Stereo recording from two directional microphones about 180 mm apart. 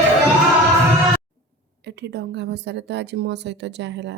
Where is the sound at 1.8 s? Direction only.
70° right (ahead or behind).